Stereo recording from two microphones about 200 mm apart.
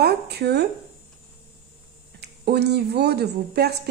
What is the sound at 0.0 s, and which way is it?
Speech, 55° right (ahead or behind).